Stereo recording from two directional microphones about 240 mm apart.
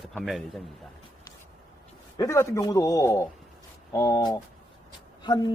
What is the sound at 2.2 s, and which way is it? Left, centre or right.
Speech, centre.